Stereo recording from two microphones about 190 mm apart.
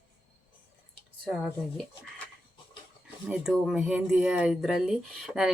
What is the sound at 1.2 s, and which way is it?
Speech, centre (ahead or behind).